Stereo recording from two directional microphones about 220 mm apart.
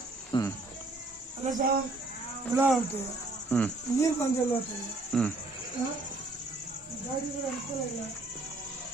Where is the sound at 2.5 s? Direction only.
5° right (ahead or behind).